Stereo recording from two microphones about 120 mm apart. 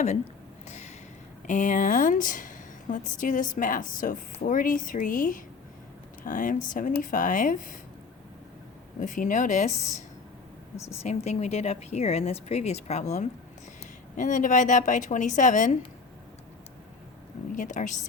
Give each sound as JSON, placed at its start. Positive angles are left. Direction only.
{"t": 1.5, "sound": "a woman's voice", "side_deg": 85}
{"t": 9.0, "sound": "a woman's voice", "side_deg": 90}
{"t": 11.0, "sound": "speech", "side_deg": 65}
{"t": 14.2, "sound": "a woman's voice", "side_deg": 90}
{"t": 17.6, "sound": "a woman's voice", "side_deg": 90}